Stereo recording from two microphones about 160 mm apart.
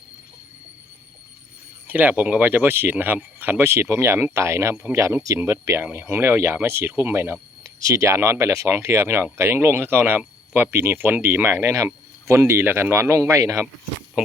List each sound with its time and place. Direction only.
1.9 s speech: 10° right (ahead or behind)
14.2 s speech: 5° right (ahead or behind)